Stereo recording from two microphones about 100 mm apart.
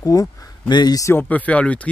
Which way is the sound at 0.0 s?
35° left (ahead or behind).